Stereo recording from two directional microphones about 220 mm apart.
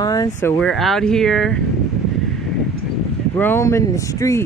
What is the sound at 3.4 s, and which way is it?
Speech, 10° left (ahead or behind).